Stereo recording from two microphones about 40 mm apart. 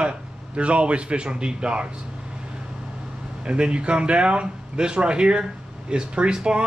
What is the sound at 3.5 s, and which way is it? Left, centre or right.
A man's voice, right.